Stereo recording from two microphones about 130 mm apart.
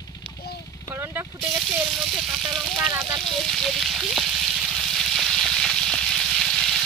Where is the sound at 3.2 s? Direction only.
Centre (ahead or behind).